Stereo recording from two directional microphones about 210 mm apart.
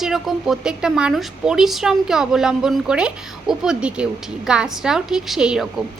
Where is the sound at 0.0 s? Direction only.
Centre (ahead or behind).